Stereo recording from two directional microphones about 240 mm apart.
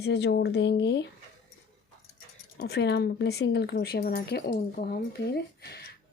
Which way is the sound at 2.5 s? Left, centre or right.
Left.